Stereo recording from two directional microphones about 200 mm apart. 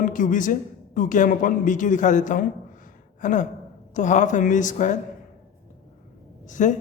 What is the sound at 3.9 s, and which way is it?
A man's voice, 40° left (ahead or behind).